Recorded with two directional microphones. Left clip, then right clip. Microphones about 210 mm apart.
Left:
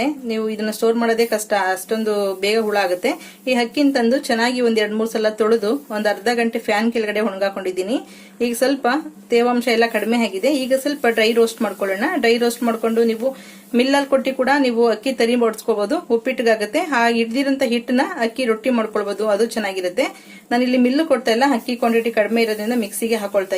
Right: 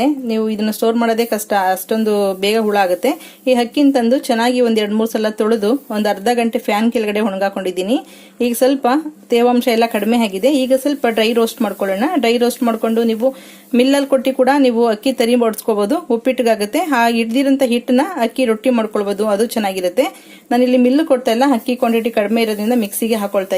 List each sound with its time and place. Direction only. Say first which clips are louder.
0.0 s speech: right 5 dB; 25° right (ahead or behind)